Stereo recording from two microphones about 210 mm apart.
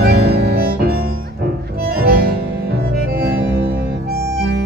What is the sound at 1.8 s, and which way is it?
Music, 45° right (ahead or behind).